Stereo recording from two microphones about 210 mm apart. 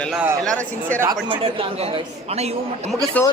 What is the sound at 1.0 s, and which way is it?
A man's voice, 20° right (ahead or behind).